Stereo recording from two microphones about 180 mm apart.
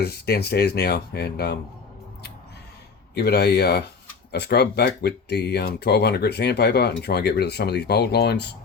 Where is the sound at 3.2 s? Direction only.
65° left (ahead or behind).